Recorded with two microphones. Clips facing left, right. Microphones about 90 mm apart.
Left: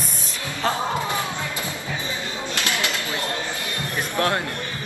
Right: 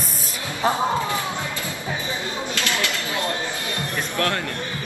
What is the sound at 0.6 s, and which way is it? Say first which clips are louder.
Speech: right 2 dB; 10° right (ahead or behind).